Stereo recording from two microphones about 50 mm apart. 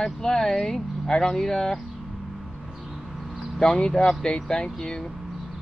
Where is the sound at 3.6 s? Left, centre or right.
Centre.